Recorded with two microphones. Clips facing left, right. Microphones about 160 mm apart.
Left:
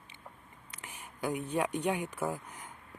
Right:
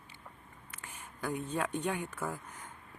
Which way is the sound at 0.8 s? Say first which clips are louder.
Left 3 dB; 15° left (ahead or behind).